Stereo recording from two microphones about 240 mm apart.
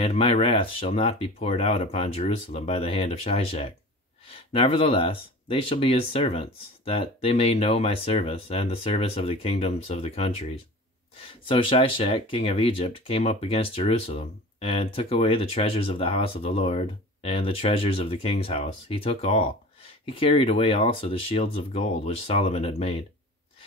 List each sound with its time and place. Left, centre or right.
0.0 s speech: left